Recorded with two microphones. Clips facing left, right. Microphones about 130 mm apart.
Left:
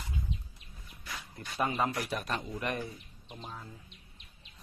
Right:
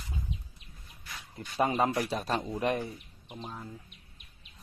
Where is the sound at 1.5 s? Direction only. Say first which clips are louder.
Right 4 dB; 30° right (ahead or behind).